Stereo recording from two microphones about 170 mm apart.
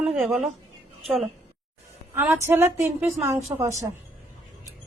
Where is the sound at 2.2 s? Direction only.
15° right (ahead or behind).